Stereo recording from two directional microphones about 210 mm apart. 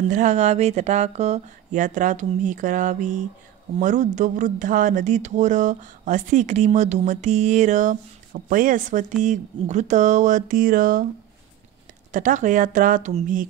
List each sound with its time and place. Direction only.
0.1 s speech: 35° right (ahead or behind)
12.1 s speech: 35° right (ahead or behind)